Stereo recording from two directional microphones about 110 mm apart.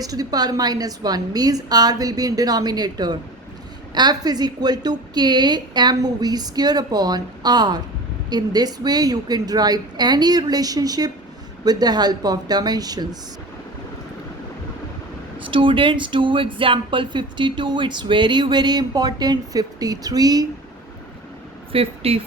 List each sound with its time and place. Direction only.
0.0 s a woman's voice: 35° right (ahead or behind)
15.4 s speech: 50° right (ahead or behind); by 20.5 s 35° right (ahead or behind)
21.7 s a woman's voice: 60° right (ahead or behind)